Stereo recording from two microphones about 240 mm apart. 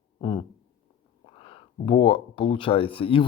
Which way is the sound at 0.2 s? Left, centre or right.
Centre.